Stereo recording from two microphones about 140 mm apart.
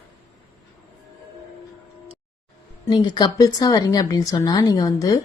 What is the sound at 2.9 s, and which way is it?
Speech, 30° left (ahead or behind).